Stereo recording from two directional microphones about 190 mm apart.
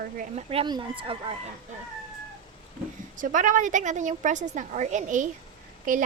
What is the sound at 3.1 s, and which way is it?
A woman's voice, 45° right (ahead or behind).